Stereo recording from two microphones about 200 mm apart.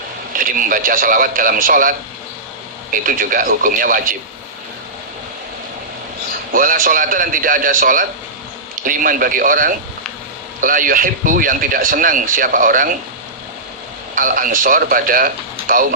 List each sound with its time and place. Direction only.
0.3 s speech: 45° right (ahead or behind)
6.5 s speech: 40° right (ahead or behind)
14.2 s speech: 45° right (ahead or behind)